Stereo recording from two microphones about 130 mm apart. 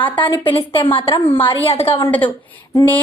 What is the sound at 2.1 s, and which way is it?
Speech, 15° left (ahead or behind).